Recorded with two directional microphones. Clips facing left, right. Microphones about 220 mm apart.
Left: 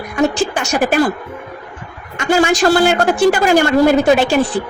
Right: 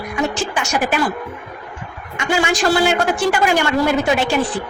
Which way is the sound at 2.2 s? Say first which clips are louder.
Left 5 dB; 45° left (ahead or behind).